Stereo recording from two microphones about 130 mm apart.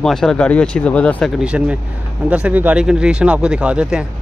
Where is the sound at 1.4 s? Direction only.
10° right (ahead or behind).